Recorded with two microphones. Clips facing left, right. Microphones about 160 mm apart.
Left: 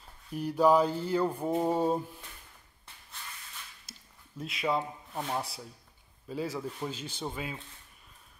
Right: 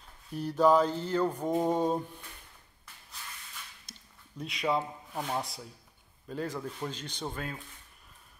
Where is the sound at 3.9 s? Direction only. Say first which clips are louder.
Even; 5° left (ahead or behind).